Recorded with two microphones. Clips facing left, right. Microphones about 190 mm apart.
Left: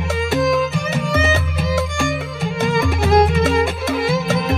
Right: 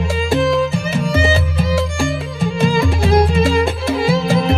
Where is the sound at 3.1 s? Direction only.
20° left (ahead or behind).